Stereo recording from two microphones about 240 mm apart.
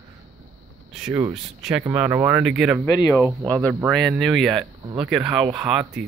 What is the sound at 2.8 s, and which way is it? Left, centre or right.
Speech, centre.